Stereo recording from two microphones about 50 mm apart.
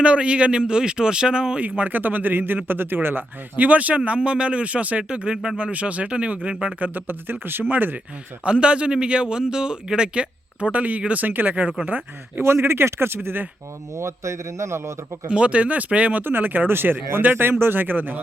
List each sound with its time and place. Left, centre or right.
0.0 s speech: right
1.6 s a man's voice: right
3.6 s a man's voice: right
6.7 s a man's voice: right
7.1 s a man's voice: right
8.4 s a man's voice: right
12.4 s speech: right
13.9 s a man's voice: right
15.3 s a man's voice: right
16.2 s speech: right